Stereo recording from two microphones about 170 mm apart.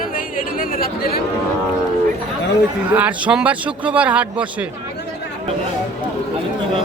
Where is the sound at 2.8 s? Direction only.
10° right (ahead or behind).